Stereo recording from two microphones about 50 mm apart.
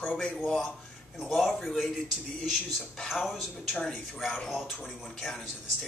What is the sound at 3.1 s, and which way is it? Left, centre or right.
Speech, centre.